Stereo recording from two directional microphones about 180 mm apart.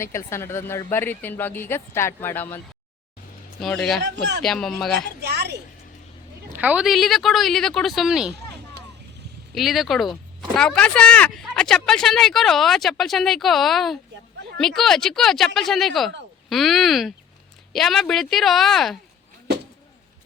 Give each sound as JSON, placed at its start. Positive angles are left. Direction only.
{"t": 0.0, "sound": "speech", "side_deg": 15}
{"t": 3.6, "sound": "speech", "side_deg": 0}
{"t": 4.0, "sound": "speech", "side_deg": -70}
{"t": 4.4, "sound": "speech", "side_deg": 0}
{"t": 5.3, "sound": "a sound", "side_deg": -65}
{"t": 6.5, "sound": "speech", "side_deg": -10}
{"t": 9.6, "sound": "speech", "side_deg": 0}